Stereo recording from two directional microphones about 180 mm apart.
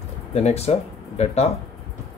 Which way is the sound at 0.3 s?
35° left (ahead or behind).